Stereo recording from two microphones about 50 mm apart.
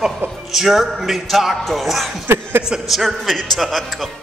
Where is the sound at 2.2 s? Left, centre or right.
Right.